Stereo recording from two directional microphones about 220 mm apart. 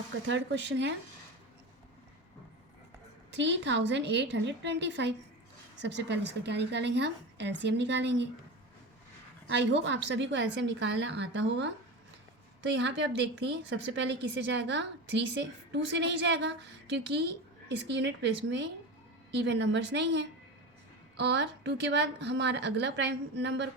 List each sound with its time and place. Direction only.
0.3 s speech: 55° right (ahead or behind)
3.3 s a woman's voice: 55° right (ahead or behind)
9.5 s a woman's voice: 50° right (ahead or behind)
12.7 s a woman's voice: 55° right (ahead or behind)
17.7 s a woman's voice: 50° right (ahead or behind)